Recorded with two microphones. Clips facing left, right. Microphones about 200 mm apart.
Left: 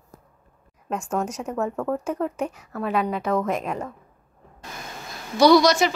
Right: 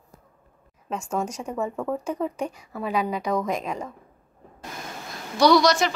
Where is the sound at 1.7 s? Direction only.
10° right (ahead or behind).